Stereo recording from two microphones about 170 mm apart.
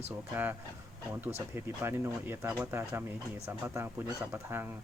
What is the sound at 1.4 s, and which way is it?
Speech, 15° right (ahead or behind).